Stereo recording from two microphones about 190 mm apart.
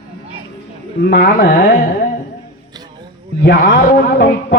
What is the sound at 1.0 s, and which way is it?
Speech, 60° left (ahead or behind).